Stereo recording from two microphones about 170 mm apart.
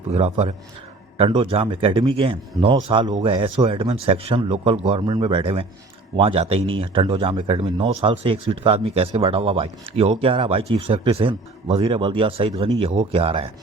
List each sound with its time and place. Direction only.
0.1 s speech: 40° right (ahead or behind)